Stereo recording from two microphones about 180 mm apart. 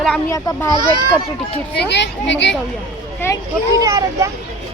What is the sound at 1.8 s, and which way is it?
Speech, 75° left (ahead or behind).